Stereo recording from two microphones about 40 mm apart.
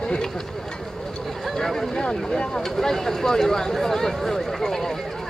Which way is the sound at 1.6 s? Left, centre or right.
Centre.